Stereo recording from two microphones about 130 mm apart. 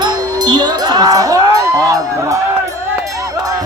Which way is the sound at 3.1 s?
25° right (ahead or behind).